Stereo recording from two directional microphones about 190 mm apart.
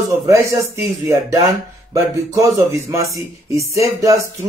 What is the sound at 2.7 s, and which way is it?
Speech, 15° right (ahead or behind).